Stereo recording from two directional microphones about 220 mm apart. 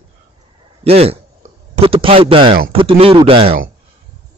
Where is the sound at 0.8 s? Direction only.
25° right (ahead or behind).